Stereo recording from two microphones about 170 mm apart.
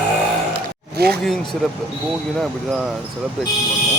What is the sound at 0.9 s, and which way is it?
Speech, 70° right (ahead or behind).